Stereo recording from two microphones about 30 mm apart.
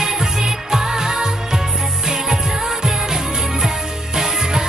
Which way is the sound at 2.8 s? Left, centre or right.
Centre.